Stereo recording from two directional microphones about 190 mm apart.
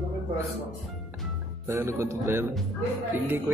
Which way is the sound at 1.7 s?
15° right (ahead or behind).